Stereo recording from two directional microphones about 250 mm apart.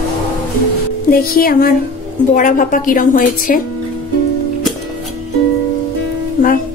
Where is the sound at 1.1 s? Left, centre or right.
Left.